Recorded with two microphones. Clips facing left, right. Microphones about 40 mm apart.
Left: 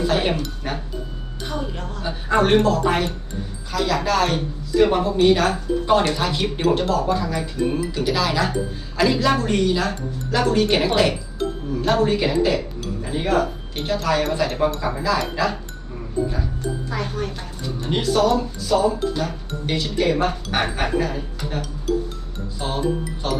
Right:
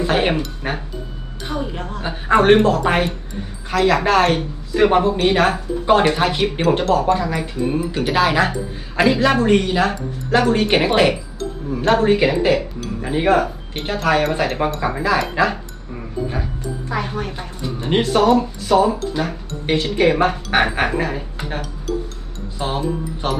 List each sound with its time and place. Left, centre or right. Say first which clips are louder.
0.0 s speech: right 3 dB; right
6.4 s speech: right 1 dB; centre
6.9 s speech: right 4 dB; right
15.4 s speech: right 4 dB; right
16.9 s speech: right 3 dB; right